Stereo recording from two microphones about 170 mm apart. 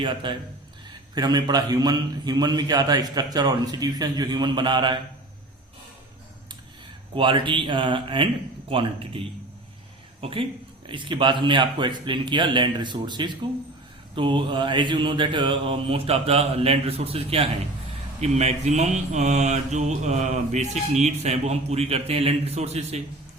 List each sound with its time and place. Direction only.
0.0 s a man's voice: 25° right (ahead or behind)
7.2 s a man's voice: 30° right (ahead or behind)
8.7 s mantra: 30° right (ahead or behind)
10.2 s a man's voice: 35° right (ahead or behind)
14.2 s mantra: 30° right (ahead or behind)